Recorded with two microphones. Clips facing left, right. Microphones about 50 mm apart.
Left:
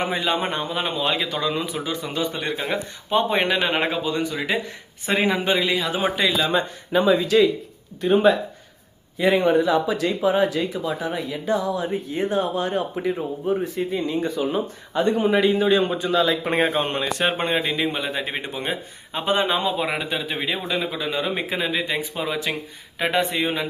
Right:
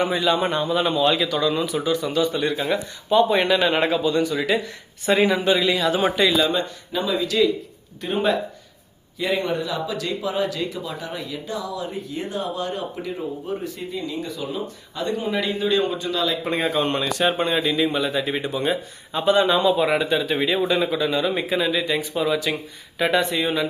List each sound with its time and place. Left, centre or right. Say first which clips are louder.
0.0 s a man's voice: right 3 dB; left; by 6.5 s centre
6.5 s a man's voice: left 3 dB; left
8.0 s speech: left 5 dB; centre
9.1 s a man's voice: left 6 dB; left
17.1 s a man's voice: right 1 dB; left
19.7 s a man's voice: right 5 dB; centre
21.2 s a man's voice: right 3 dB; left